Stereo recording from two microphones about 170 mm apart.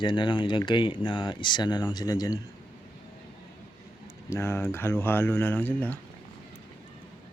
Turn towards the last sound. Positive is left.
turn(degrees=10)  # may be behind; listen again after turning